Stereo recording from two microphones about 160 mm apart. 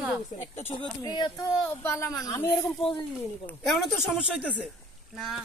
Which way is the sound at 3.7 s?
5° left (ahead or behind).